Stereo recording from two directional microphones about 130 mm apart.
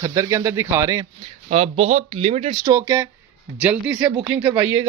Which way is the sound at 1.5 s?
55° right (ahead or behind).